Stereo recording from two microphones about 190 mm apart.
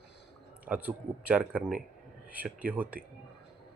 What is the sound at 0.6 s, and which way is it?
Speech, 5° right (ahead or behind).